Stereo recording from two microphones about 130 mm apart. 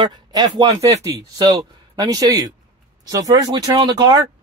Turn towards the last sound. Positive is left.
turn(degrees=-30)  # may be behind; listen again after turning